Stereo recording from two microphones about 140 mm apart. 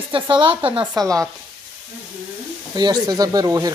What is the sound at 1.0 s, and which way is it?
Speech, 25° right (ahead or behind).